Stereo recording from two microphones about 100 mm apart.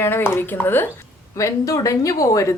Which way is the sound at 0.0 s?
25° left (ahead or behind).